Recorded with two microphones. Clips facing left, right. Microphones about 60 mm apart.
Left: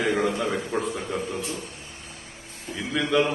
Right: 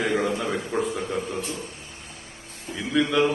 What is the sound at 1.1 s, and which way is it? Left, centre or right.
Speech, right.